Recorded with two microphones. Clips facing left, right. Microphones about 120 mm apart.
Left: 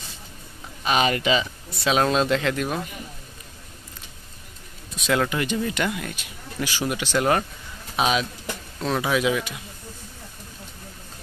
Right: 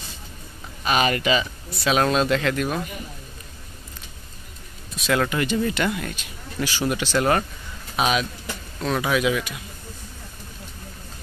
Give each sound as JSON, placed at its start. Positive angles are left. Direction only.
{"t": 0.8, "sound": "speech", "side_deg": 20}
{"t": 4.9, "sound": "speech", "side_deg": 15}
{"t": 7.9, "sound": "speech", "side_deg": 20}